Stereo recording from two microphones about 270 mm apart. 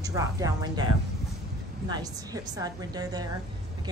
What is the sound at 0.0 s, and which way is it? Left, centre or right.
Speech, centre.